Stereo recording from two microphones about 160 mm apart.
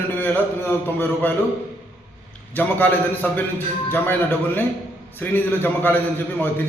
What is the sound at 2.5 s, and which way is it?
A man's voice, 10° left (ahead or behind).